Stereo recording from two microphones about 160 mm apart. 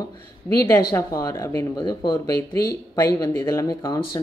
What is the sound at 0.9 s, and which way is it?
Speech, 20° left (ahead or behind).